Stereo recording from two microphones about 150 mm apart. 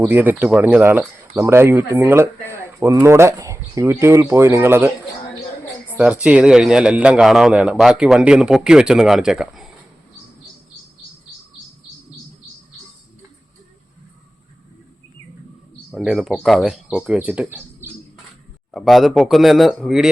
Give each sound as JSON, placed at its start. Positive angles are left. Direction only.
{"t": 0.0, "sound": "speech", "side_deg": -15}
{"t": 6.0, "sound": "a man's voice", "side_deg": -5}
{"t": 15.9, "sound": "a man's voice", "side_deg": 0}
{"t": 18.7, "sound": "a man's voice", "side_deg": 0}